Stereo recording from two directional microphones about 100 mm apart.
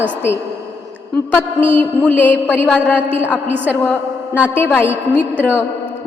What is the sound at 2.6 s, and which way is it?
Speech, 10° left (ahead or behind).